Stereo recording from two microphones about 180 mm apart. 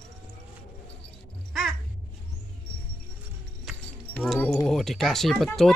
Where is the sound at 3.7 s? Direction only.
Centre (ahead or behind).